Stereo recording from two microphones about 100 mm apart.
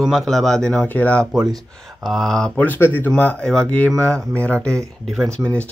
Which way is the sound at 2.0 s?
Centre (ahead or behind).